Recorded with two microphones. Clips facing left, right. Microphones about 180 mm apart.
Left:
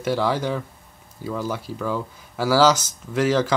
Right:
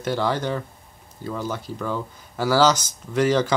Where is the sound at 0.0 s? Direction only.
5° left (ahead or behind).